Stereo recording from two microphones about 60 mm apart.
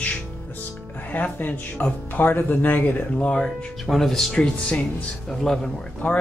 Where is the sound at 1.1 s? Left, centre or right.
Left.